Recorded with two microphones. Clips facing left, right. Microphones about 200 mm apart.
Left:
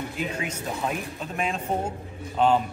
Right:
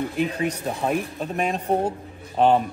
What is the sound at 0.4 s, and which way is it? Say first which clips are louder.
Speech: right 5 dB; 35° right (ahead or behind).